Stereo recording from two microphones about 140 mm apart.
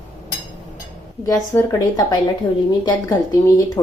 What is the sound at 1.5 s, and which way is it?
Speech, 25° left (ahead or behind).